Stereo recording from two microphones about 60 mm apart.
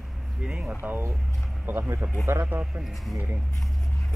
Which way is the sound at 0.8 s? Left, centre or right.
Right.